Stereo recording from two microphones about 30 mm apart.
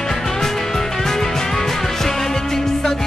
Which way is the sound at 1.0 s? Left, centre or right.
Centre.